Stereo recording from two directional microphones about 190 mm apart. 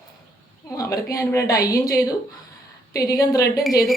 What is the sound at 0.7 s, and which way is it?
A woman's voice, 15° left (ahead or behind).